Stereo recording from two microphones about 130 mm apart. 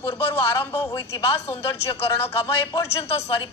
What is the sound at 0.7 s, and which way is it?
A woman's voice, 35° left (ahead or behind).